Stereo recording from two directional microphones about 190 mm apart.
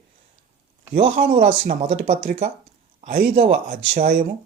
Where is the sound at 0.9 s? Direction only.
30° right (ahead or behind); by 3.2 s 45° right (ahead or behind).